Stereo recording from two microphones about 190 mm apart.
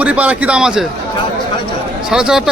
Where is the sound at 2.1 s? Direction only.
5° right (ahead or behind).